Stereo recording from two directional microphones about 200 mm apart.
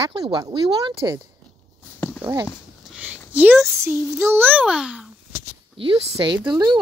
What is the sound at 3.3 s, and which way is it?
Speech, 5° right (ahead or behind).